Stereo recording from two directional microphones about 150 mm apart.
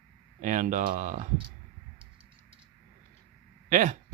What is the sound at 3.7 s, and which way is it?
Speech, 60° right (ahead or behind).